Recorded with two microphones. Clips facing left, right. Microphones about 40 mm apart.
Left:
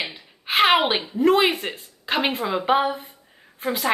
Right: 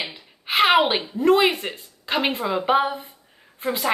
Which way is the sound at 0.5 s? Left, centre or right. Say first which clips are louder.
Even; centre.